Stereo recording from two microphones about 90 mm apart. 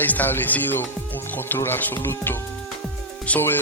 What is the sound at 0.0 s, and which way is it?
A man's voice, 20° left (ahead or behind).